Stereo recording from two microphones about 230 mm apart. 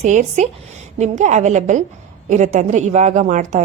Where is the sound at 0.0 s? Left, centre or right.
Right.